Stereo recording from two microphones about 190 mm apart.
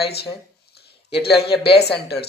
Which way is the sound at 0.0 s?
60° left (ahead or behind).